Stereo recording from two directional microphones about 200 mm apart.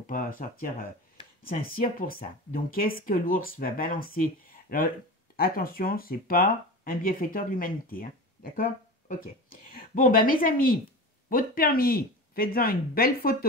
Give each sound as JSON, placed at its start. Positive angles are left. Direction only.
{"t": 0.0, "sound": "speech", "side_deg": 45}
{"t": 9.8, "sound": "speech", "side_deg": 45}